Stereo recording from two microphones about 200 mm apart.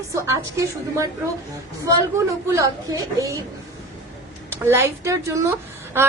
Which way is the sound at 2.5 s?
15° right (ahead or behind).